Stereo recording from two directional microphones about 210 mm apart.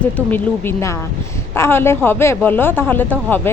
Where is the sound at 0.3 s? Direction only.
10° left (ahead or behind).